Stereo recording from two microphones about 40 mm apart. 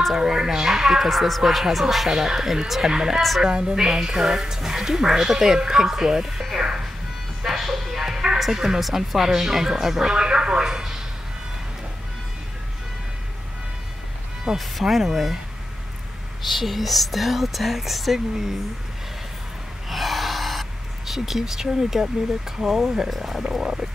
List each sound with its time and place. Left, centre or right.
0.2 s speech: centre
3.2 s speech: centre
3.4 s speech: right
6.6 s music: centre
7.4 s music: centre
8.4 s speech: centre
14.6 s speech: centre
16.4 s speech: centre
19.9 s gasp: centre
22.6 s speech: centre